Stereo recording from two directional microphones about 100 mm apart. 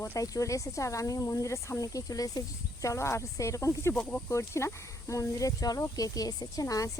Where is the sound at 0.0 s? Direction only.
30° left (ahead or behind).